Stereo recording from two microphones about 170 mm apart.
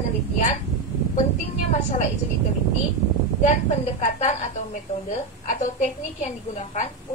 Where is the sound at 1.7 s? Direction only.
45° left (ahead or behind).